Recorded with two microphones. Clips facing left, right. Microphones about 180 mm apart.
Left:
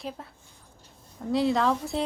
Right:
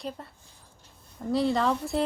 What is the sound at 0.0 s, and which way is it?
Speech, centre (ahead or behind).